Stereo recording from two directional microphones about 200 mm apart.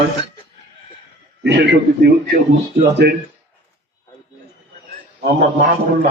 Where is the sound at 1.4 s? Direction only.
60° right (ahead or behind).